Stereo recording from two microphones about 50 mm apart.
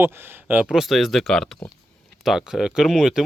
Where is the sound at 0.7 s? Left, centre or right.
Centre.